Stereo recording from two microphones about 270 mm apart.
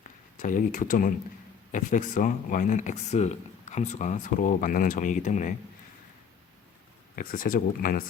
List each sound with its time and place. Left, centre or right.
0.3 s speech: left
7.2 s speech: left